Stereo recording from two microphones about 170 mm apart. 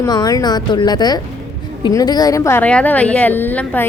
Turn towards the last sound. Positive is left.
turn(degrees=10)  # may be behind; listen again after turning